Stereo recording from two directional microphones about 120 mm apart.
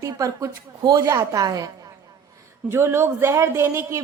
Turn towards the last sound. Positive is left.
turn(degrees=-20)  # may be behind; listen again after turning